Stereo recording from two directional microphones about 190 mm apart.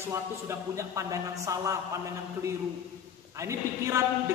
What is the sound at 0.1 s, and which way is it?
A man's voice, 15° right (ahead or behind).